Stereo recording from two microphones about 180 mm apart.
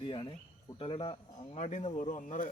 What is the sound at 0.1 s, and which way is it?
Speech, 30° left (ahead or behind).